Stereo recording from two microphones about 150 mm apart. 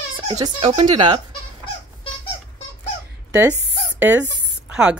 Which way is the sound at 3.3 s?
10° right (ahead or behind).